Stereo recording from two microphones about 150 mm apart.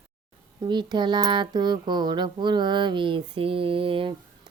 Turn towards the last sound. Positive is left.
turn(degrees=-35)  # may be behind; listen again after turning